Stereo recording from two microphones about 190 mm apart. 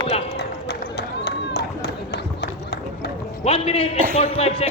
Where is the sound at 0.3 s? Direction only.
60° left (ahead or behind).